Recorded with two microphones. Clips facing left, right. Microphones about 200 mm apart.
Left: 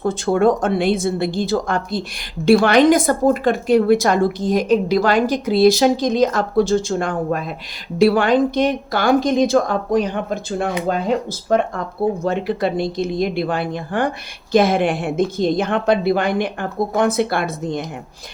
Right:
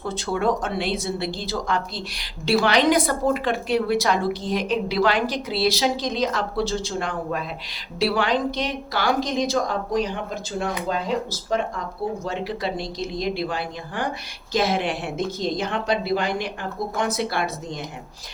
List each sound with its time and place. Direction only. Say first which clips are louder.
0.0 s speech: left 8 dB; 50° left (ahead or behind)